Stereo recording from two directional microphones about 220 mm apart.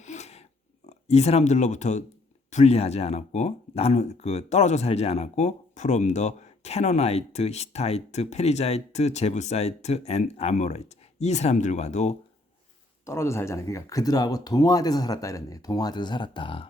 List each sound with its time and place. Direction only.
0.0 s pig: 30° left (ahead or behind)
0.9 s speech: 30° left (ahead or behind)
13.1 s speech: 10° left (ahead or behind)